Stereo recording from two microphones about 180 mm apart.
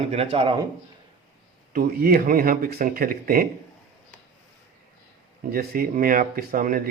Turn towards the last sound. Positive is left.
turn(degrees=-50)  # may be behind; listen again after turning